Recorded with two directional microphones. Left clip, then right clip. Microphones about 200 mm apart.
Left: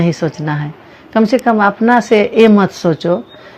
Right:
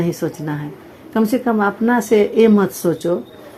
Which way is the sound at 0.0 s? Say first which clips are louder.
Left 5 dB; 25° left (ahead or behind).